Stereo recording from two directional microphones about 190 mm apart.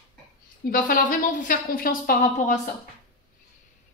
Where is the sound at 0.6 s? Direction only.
45° left (ahead or behind).